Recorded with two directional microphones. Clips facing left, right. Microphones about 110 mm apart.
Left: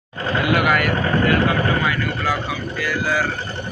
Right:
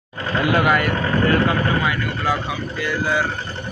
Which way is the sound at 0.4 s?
30° right (ahead or behind).